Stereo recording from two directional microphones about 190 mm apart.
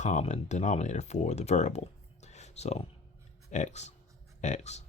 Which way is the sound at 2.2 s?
35° left (ahead or behind).